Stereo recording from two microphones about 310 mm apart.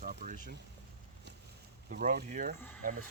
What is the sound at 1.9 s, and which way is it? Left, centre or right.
Speech, right.